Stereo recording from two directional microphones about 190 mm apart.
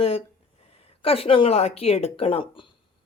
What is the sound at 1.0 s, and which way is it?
Speech, 30° left (ahead or behind).